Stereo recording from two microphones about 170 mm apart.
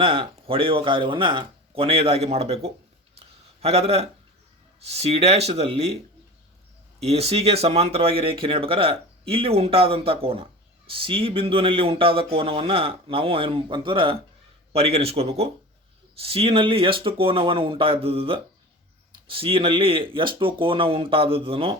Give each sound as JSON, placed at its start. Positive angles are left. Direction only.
{"t": 0.0, "sound": "speech", "side_deg": -30}
{"t": 3.2, "sound": "a sound", "side_deg": -35}
{"t": 4.8, "sound": "speech", "side_deg": -40}
{"t": 7.0, "sound": "speech", "side_deg": -35}